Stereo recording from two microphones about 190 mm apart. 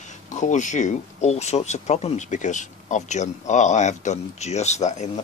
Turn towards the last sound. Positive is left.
turn(degrees=40)  # may be behind; listen again after turning